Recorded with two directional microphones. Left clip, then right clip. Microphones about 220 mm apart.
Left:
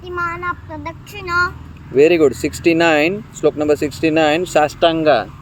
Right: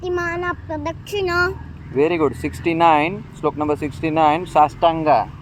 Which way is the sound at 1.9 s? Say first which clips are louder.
Left 6 dB; 50° left (ahead or behind).